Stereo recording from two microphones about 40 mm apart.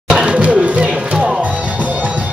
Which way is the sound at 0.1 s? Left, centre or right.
Right.